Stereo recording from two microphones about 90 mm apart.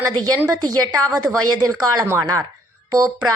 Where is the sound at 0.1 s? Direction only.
45° right (ahead or behind).